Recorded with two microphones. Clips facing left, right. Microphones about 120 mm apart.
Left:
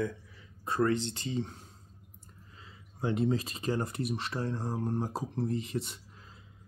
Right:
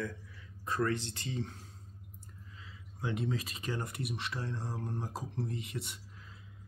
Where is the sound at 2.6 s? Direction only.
35° left (ahead or behind).